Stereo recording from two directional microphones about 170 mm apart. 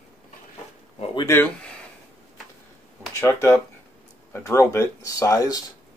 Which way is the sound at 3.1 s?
15° left (ahead or behind).